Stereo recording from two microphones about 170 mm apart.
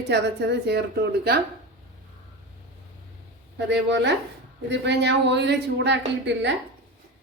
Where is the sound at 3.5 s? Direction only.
90° right.